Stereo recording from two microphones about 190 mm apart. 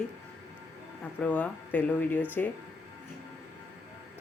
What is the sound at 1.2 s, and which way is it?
Speech, 10° left (ahead or behind).